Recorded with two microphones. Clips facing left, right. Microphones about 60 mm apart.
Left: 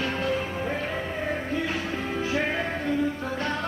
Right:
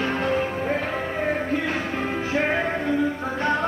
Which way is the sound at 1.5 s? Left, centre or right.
Right.